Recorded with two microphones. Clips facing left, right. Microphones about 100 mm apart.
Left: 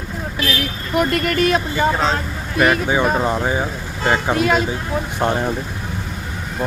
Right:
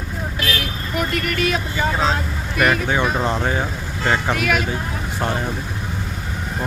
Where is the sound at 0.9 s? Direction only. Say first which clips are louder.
Left 5 dB; 40° left (ahead or behind).